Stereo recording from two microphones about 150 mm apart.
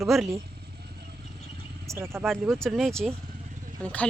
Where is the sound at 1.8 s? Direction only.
20° right (ahead or behind).